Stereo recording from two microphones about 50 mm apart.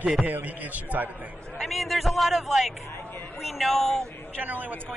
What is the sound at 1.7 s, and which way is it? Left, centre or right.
A man's voice, centre.